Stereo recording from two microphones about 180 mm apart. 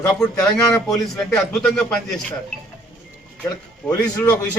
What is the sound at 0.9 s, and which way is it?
Speech, 5° left (ahead or behind).